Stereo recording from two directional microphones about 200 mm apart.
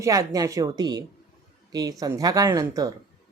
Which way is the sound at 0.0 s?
15° right (ahead or behind).